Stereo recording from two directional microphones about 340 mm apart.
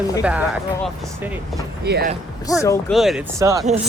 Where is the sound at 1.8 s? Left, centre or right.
Right.